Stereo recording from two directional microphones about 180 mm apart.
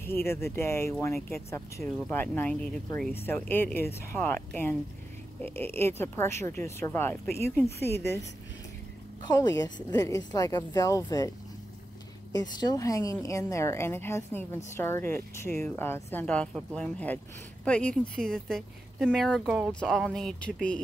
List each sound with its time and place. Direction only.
0.0 s speech: 15° left (ahead or behind)
7.8 s a woman's voice: 65° left (ahead or behind)
9.2 s a woman's voice: 20° left (ahead or behind); by 20.8 s 5° left (ahead or behind)